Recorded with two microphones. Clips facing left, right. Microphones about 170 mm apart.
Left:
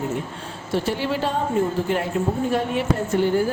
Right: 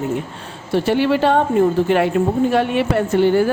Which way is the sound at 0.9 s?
70° right (ahead or behind).